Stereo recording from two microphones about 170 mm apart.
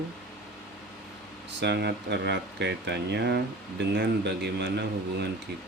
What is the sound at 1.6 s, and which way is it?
Speech, 80° right.